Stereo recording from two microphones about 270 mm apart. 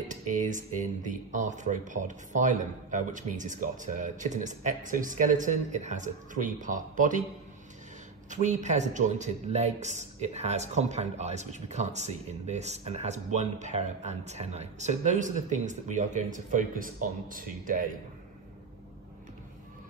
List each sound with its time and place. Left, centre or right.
0.1 s a man's voice: right
8.3 s a man's voice: right